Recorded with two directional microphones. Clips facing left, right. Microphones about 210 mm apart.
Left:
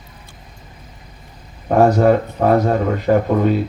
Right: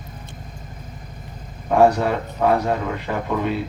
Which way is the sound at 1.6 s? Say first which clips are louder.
Left 4 dB; 45° left (ahead or behind).